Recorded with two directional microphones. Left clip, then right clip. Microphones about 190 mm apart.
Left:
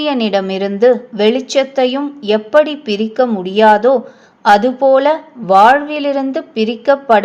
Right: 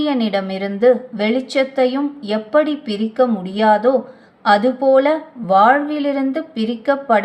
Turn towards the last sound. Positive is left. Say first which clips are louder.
# left 5 dB
turn(degrees=30)  # may be behind; listen again after turning